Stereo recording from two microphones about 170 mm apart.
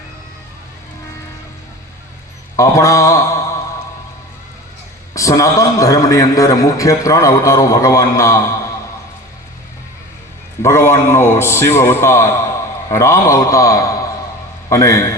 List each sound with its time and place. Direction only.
2.6 s mantra: 15° left (ahead or behind)
5.1 s a man's voice: 20° left (ahead or behind)
10.6 s a man's voice: 15° left (ahead or behind)